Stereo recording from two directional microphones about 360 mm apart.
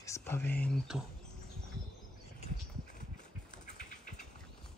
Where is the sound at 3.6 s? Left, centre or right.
Left.